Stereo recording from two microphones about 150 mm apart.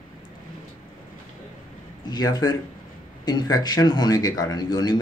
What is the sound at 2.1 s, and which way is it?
A man's voice, 25° left (ahead or behind).